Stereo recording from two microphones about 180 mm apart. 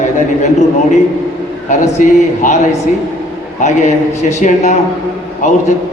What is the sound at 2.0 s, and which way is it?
Speech, 40° left (ahead or behind).